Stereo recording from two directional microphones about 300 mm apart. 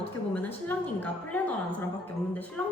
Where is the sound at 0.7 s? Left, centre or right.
Centre.